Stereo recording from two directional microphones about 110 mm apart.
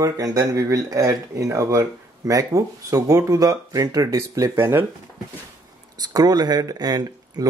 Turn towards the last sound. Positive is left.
turn(degrees=-35)  # may be behind; listen again after turning